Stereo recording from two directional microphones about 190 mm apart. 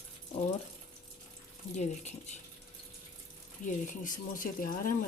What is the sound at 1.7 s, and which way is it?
Speech, 35° left (ahead or behind).